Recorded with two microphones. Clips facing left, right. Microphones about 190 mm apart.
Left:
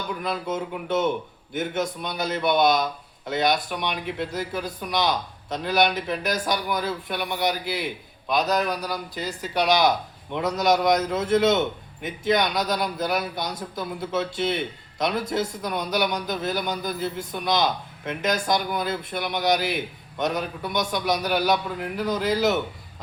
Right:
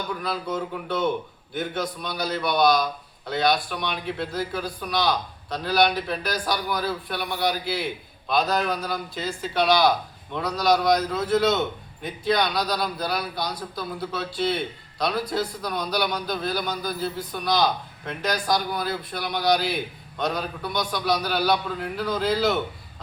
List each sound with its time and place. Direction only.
0.2 s a man's voice: 20° left (ahead or behind)